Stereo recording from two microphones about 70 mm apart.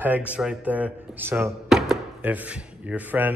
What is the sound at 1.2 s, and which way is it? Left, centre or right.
Speech, right.